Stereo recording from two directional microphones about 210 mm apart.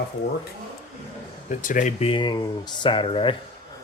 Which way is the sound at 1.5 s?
35° left (ahead or behind).